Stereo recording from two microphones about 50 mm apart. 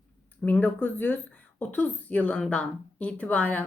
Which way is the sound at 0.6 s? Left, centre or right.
Left.